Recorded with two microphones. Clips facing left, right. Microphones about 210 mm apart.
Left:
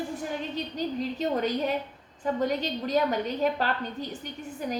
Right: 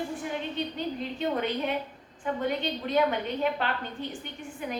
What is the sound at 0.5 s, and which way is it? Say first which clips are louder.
A woman's voice: left 2 dB; 40° left (ahead or behind).